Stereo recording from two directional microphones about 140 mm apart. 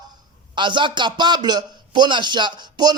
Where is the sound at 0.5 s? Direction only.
35° right (ahead or behind).